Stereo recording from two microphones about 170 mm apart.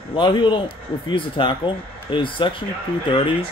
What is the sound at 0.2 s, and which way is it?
Speech, 30° left (ahead or behind).